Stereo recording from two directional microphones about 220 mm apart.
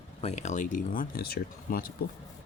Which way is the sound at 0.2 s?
30° left (ahead or behind).